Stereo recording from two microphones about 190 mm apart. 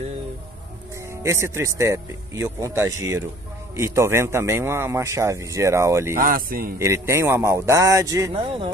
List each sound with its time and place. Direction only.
1.2 s speech: 15° right (ahead or behind)
6.1 s speech: 50° right (ahead or behind)
6.8 s speech: 15° right (ahead or behind)
8.3 s speech: 30° right (ahead or behind)